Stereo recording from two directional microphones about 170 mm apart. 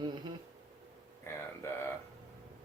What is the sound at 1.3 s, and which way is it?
Speech, 15° left (ahead or behind).